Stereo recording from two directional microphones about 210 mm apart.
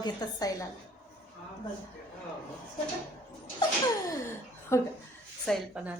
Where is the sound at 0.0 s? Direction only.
20° left (ahead or behind).